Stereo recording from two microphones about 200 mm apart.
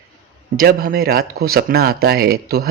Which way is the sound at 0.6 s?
45° right (ahead or behind).